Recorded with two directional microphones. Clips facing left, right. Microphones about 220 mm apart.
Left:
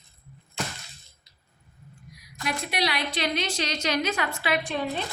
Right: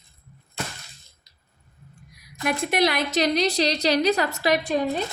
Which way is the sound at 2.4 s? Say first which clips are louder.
Right 6 dB; 50° right (ahead or behind).